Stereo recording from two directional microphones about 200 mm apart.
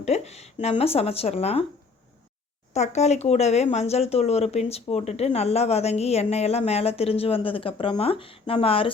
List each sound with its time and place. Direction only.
0.0 s speech: 30° left (ahead or behind)
2.7 s speech: 35° left (ahead or behind)